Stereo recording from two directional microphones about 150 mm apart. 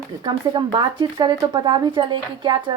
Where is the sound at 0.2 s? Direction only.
30° right (ahead or behind).